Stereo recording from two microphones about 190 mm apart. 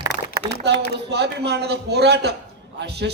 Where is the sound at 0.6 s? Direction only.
65° right (ahead or behind).